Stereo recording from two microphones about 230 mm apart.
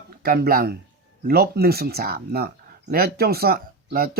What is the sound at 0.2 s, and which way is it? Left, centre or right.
Speech, right.